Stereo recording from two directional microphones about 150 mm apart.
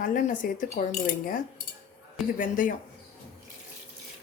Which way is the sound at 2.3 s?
65° left (ahead or behind).